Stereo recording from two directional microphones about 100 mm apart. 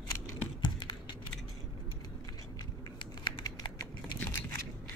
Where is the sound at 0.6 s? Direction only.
50° left (ahead or behind).